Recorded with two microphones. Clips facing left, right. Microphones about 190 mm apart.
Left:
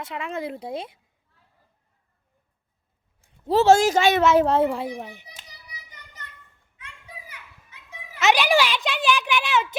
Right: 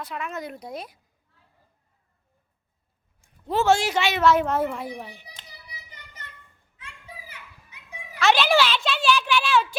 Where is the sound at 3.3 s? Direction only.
30° left (ahead or behind).